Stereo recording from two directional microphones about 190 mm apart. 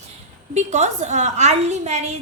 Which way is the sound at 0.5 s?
35° right (ahead or behind).